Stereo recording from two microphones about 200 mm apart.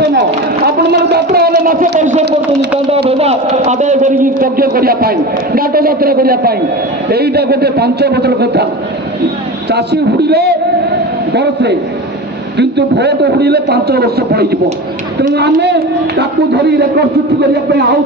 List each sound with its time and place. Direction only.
0.0 s a sound: 55° right (ahead or behind); by 2.2 s 40° right (ahead or behind)
3.1 s a man's voice: 30° right (ahead or behind); by 8.6 s 55° right (ahead or behind)
9.7 s a man's voice: 55° right (ahead or behind)